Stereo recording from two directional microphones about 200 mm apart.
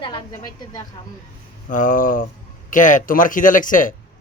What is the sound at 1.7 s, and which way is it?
Speech, 40° left (ahead or behind).